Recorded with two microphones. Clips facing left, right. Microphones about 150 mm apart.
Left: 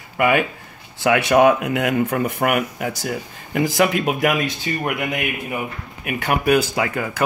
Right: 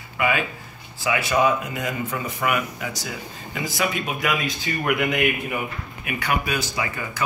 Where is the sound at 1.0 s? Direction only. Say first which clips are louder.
Left 7 dB; 70° left (ahead or behind).